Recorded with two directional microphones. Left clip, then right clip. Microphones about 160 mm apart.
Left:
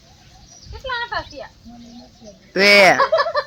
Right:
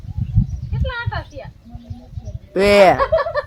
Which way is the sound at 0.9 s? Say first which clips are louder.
Left 3 dB; 30° right (ahead or behind).